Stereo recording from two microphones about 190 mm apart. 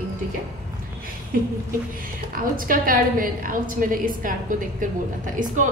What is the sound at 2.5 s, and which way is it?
A woman's voice, 50° right (ahead or behind).